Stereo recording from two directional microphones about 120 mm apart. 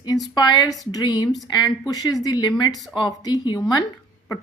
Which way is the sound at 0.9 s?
30° left (ahead or behind).